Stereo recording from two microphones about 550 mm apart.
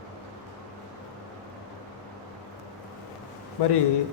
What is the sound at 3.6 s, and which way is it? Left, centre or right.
Speech, left.